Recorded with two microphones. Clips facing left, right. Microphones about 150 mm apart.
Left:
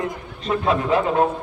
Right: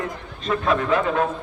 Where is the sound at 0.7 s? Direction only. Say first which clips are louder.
Left 1 dB; 25° left (ahead or behind).